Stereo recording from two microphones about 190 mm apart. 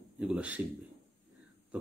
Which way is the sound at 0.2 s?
5° right (ahead or behind).